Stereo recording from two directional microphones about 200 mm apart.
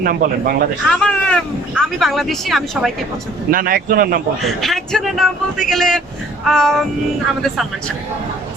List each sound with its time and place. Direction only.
0.0 s speech: 45° right (ahead or behind)
0.9 s speech: 5° left (ahead or behind)
3.5 s speech: 45° right (ahead or behind)
4.4 s speech: centre (ahead or behind)